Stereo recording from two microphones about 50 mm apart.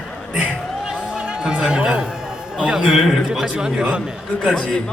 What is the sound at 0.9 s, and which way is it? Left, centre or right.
Music, centre.